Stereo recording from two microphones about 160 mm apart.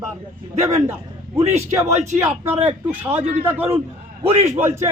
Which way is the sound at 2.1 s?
15° right (ahead or behind).